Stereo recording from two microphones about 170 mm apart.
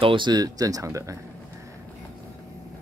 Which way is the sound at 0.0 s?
30° right (ahead or behind).